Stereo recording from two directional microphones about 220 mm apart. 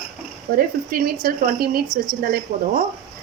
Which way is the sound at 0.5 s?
40° right (ahead or behind).